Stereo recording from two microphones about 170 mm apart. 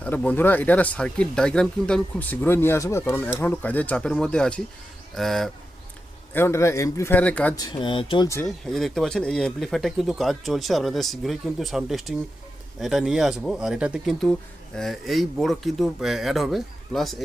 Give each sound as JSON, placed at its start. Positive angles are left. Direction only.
{"t": 0.0, "sound": "speech", "side_deg": 10}
{"t": 6.3, "sound": "speech", "side_deg": 15}
{"t": 7.5, "sound": "speech", "side_deg": 25}
{"t": 8.4, "sound": "speech", "side_deg": 0}